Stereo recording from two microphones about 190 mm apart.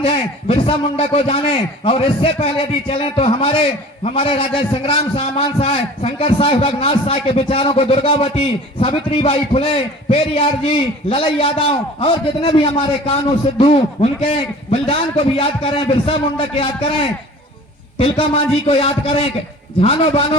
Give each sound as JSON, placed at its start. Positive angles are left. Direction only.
{"t": 0.0, "sound": "a man's voice", "side_deg": 30}
{"t": 17.9, "sound": "a man's voice", "side_deg": 30}